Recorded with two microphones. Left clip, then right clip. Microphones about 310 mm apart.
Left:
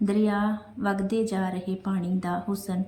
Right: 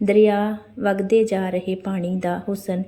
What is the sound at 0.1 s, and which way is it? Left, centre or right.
A woman's voice, centre.